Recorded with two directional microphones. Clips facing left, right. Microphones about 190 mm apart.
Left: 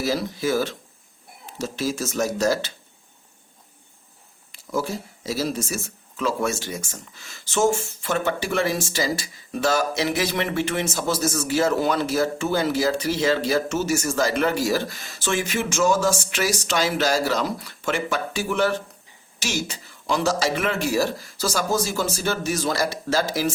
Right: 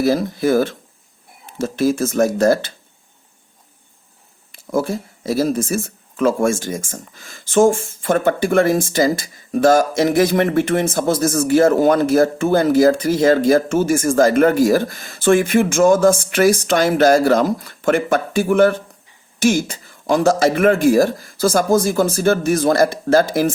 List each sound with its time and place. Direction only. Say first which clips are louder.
0.0 s speech: right 7 dB; 55° right (ahead or behind)
4.5 s speech: right 6 dB; 55° right (ahead or behind)